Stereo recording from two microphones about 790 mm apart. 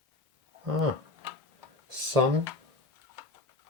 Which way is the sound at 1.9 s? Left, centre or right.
Right.